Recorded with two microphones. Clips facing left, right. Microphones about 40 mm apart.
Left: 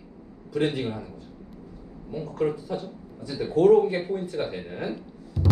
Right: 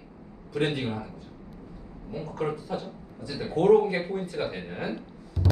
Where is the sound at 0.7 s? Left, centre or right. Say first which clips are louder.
Left 1 dB; right.